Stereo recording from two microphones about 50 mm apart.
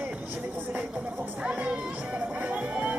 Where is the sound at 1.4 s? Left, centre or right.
Centre.